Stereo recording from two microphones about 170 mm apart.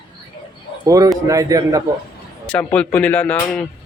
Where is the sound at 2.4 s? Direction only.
5° left (ahead or behind).